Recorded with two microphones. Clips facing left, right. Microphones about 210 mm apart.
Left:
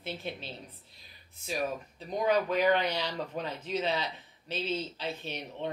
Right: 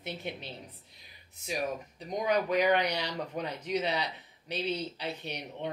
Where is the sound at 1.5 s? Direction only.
15° right (ahead or behind).